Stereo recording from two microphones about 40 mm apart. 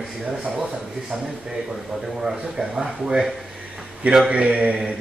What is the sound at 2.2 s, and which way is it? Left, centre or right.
Speech, centre.